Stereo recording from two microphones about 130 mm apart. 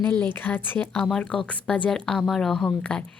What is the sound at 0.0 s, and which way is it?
A woman's voice, 15° left (ahead or behind).